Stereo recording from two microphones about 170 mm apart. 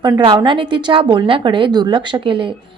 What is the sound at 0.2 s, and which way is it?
A woman's voice, 30° right (ahead or behind).